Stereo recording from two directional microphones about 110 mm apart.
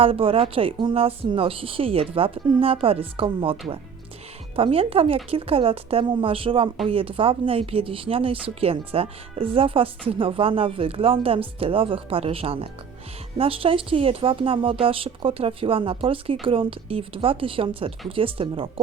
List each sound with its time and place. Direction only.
0.0 s speech: 55° right (ahead or behind)